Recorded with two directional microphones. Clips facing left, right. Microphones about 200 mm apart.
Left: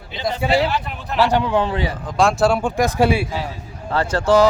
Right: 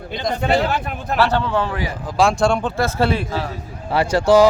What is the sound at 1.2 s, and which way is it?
Speech, 15° left (ahead or behind).